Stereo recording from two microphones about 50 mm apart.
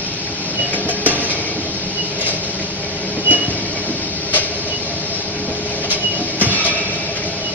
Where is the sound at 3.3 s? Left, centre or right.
Right.